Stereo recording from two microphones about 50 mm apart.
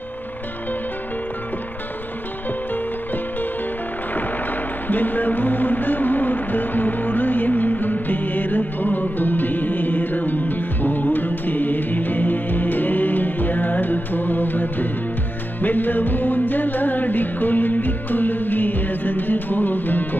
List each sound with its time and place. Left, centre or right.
4.8 s music: left